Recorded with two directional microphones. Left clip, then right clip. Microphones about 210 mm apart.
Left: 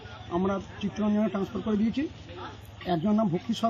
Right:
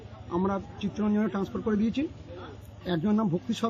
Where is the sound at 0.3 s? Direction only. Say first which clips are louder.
Even; 20° right (ahead or behind).